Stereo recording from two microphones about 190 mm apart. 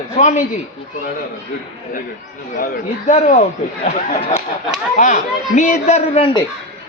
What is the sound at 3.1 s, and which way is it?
Speech, 40° left (ahead or behind).